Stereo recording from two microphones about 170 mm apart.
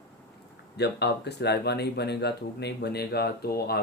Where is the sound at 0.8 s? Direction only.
80° left.